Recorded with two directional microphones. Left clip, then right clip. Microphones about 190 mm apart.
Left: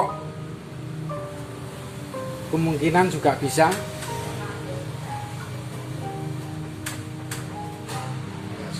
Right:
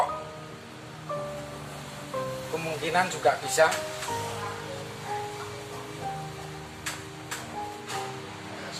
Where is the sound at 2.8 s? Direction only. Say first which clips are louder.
Left 4 dB; 30° left (ahead or behind).